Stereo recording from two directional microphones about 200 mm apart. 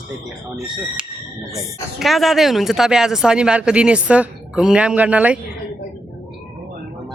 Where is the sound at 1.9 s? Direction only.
Centre (ahead or behind).